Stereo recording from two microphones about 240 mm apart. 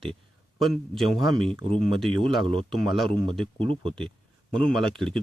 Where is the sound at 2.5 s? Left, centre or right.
Right.